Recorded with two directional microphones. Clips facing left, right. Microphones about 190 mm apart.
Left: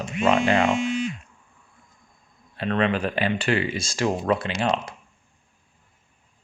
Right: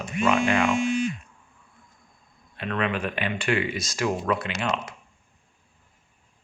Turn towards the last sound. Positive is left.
turn(degrees=35)  # may be behind; listen again after turning